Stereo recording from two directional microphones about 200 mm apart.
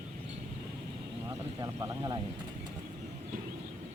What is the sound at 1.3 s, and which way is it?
Speech, 20° right (ahead or behind).